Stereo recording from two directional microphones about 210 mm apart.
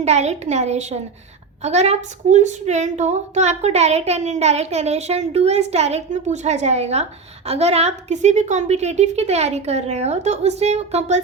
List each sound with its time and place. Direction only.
0.0 s speech: 30° right (ahead or behind)